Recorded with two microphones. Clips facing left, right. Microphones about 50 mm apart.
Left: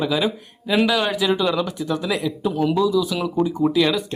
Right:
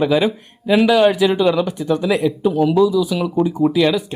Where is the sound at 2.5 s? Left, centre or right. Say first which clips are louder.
Right 3 dB; centre.